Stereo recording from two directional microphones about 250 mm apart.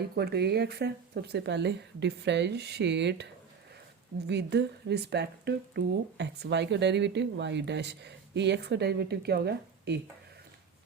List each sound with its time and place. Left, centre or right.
0.2 s speech: right
4.3 s speech: right